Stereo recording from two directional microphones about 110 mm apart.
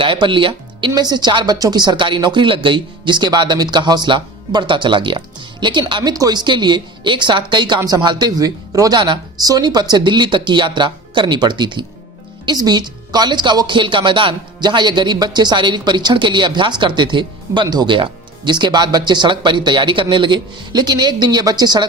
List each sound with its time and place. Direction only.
0.0 s a woman's voice: 50° right (ahead or behind)